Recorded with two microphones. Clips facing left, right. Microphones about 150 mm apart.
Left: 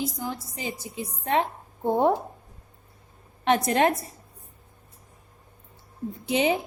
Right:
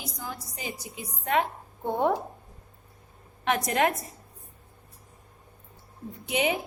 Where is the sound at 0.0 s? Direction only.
30° left (ahead or behind).